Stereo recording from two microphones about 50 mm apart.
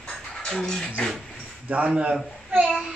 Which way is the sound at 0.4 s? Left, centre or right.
Centre.